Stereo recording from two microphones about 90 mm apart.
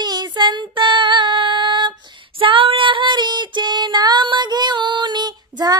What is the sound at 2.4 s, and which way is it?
Female singing, 80° right.